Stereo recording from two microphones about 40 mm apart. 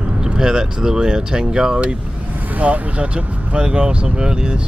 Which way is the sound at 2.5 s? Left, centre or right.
Right.